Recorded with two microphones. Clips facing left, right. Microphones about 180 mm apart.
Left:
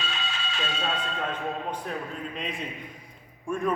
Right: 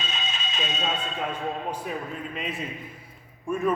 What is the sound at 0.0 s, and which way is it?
Music, 20° right (ahead or behind).